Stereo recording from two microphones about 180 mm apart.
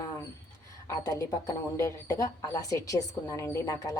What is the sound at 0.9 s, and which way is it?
Speech, 20° left (ahead or behind).